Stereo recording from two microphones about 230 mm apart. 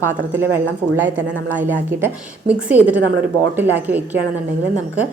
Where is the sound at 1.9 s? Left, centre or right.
Centre.